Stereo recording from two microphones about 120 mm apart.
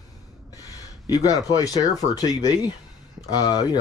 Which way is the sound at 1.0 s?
30° left (ahead or behind).